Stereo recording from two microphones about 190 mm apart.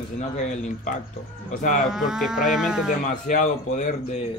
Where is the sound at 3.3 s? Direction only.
40° left (ahead or behind).